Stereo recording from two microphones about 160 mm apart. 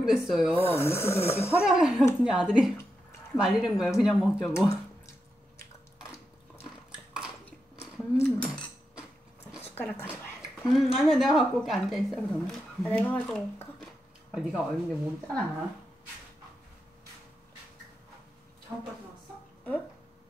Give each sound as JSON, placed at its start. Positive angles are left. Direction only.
{"t": 0.0, "sound": "a woman's voice", "side_deg": -5}
{"t": 0.6, "sound": "speech", "side_deg": 15}
{"t": 1.6, "sound": "a woman's voice", "side_deg": -5}
{"t": 7.8, "sound": "speech", "side_deg": 10}
{"t": 9.6, "sound": "a sound", "side_deg": 15}
{"t": 10.7, "sound": "a woman's voice", "side_deg": 0}
{"t": 14.3, "sound": "a woman's voice", "side_deg": 0}
{"t": 18.7, "sound": "speech", "side_deg": -15}